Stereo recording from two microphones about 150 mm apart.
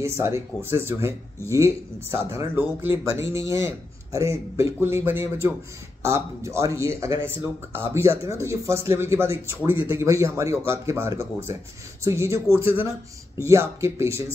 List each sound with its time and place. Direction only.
0.0 s speech: 20° right (ahead or behind)